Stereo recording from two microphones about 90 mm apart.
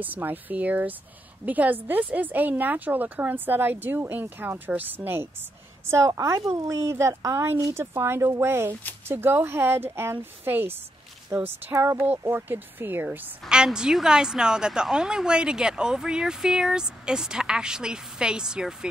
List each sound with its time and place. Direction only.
0.0 s a woman's voice: 20° right (ahead or behind)
13.5 s a woman's voice: 10° right (ahead or behind)